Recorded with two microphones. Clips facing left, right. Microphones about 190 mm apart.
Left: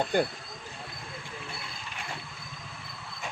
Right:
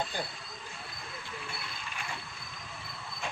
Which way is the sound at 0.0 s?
60° left (ahead or behind).